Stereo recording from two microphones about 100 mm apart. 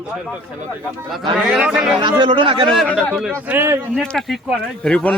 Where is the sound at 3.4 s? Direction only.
25° right (ahead or behind).